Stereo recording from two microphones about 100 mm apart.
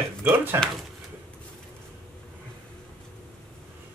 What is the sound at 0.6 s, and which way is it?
Speech, 25° right (ahead or behind).